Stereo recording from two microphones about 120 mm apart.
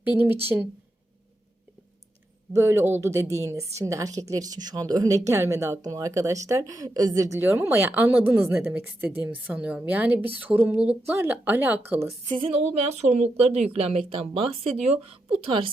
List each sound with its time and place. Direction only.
0.0 s speech: 15° right (ahead or behind)
2.5 s a woman's voice: 20° right (ahead or behind)
12.4 s a woman's voice: 60° right (ahead or behind)